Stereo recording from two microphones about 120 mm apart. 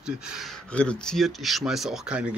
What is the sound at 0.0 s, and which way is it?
Speech, 5° right (ahead or behind).